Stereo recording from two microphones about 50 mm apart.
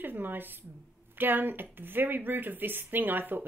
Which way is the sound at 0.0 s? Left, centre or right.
Right.